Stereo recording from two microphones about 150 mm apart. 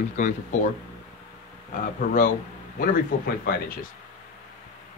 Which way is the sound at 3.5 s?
75° left (ahead or behind).